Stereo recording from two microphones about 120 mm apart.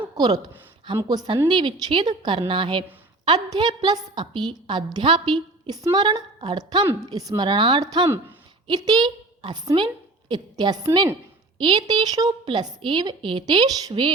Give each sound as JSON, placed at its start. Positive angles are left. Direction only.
{"t": 0.2, "sound": "a woman's voice", "side_deg": -35}